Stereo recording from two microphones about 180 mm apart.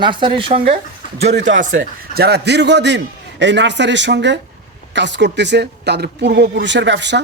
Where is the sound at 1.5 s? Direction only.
45° right (ahead or behind).